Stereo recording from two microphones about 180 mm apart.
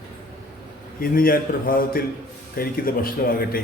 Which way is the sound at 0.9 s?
55° left (ahead or behind).